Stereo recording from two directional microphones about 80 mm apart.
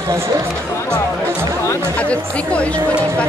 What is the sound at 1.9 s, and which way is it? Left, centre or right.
Speech, centre.